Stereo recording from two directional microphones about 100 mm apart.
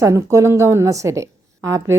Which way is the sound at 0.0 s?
30° right (ahead or behind).